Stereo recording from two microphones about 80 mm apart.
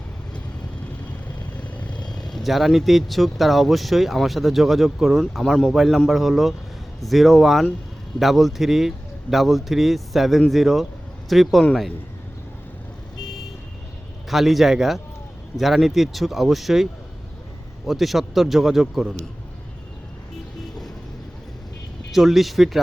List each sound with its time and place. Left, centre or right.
1.6 s vehicle: centre
2.0 s speech: centre
14.3 s speech: centre
22.1 s speech: centre